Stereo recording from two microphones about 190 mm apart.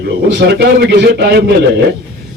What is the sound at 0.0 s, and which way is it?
A man's voice, 65° right (ahead or behind).